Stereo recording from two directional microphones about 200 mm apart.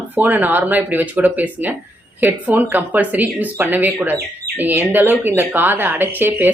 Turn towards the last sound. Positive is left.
turn(degrees=-10)  # may be behind; listen again after turning